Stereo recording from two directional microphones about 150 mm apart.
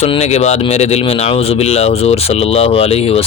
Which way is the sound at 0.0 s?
45° left (ahead or behind).